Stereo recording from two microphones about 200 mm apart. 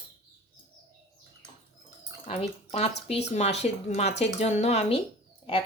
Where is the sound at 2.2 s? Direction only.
30° left (ahead or behind).